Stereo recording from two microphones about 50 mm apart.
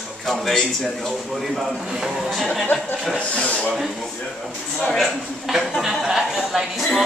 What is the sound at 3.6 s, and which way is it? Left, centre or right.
A man's voice, centre.